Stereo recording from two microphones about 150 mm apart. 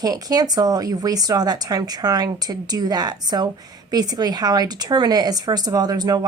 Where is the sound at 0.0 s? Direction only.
25° right (ahead or behind).